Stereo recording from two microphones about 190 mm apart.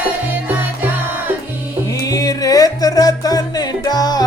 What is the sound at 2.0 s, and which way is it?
Music, 20° left (ahead or behind).